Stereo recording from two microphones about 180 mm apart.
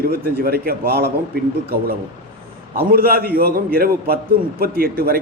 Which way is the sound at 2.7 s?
55° right (ahead or behind).